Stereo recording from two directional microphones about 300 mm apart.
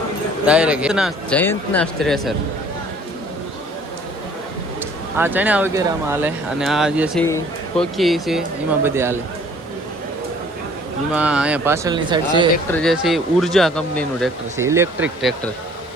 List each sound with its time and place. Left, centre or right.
0.4 s speech: centre
5.1 s speech: centre
11.1 s speech: centre
12.7 s speech: centre
14.5 s speech: centre